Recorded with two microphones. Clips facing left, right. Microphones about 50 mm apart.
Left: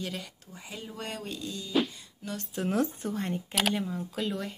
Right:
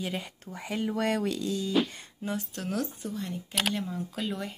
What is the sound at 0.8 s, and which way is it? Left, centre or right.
Music, right.